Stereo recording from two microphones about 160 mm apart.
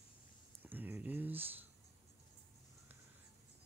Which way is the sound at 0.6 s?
10° right (ahead or behind).